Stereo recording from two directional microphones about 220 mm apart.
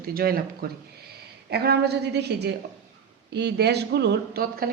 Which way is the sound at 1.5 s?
45° right (ahead or behind).